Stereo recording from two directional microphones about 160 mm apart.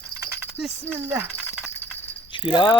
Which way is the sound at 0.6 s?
5° right (ahead or behind).